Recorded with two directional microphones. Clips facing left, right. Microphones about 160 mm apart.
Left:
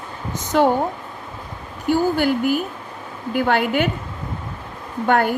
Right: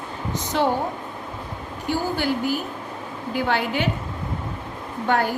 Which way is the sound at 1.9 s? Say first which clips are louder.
Left 6 dB; 50° left (ahead or behind).